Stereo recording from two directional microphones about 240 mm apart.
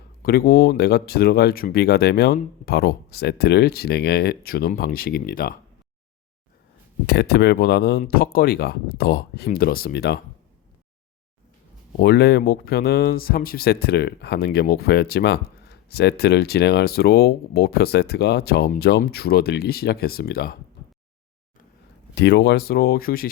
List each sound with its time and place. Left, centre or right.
0.2 s speech: left
7.1 s speech: left
11.9 s speech: left
22.1 s speech: left